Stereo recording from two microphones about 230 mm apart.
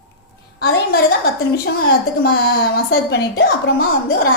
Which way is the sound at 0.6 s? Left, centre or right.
Left.